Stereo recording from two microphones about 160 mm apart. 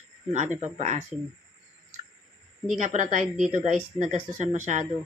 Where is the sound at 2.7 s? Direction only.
50° right (ahead or behind).